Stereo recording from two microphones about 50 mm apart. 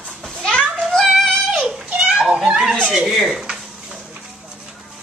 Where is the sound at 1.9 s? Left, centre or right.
Right.